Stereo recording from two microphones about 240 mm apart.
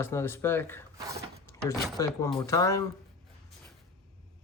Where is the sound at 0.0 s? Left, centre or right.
Centre.